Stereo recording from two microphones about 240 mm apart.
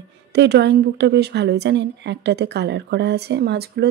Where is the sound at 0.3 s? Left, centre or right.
Right.